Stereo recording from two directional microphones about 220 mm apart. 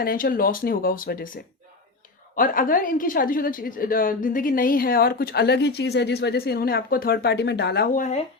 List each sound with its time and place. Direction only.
0.0 s a woman's voice: 40° left (ahead or behind)